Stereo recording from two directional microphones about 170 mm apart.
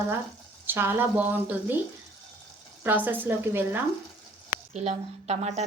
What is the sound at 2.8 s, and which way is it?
Speech, 10° right (ahead or behind).